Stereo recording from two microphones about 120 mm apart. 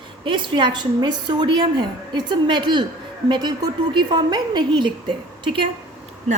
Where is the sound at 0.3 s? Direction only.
40° right (ahead or behind).